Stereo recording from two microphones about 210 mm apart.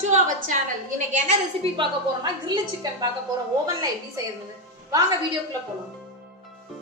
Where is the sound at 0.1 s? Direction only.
35° right (ahead or behind).